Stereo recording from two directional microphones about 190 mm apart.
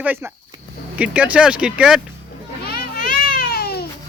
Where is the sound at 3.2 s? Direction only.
55° left (ahead or behind).